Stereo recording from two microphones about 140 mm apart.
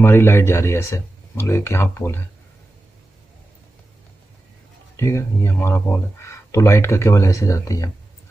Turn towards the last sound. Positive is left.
turn(degrees=25)  # may be behind; listen again after turning